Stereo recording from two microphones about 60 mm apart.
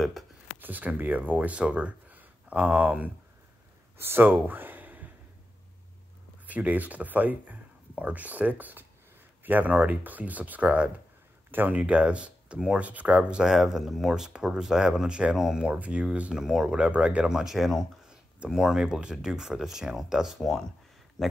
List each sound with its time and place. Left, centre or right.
0.6 s speech: right
4.0 s speech: right
6.4 s speech: right
11.8 s speech: right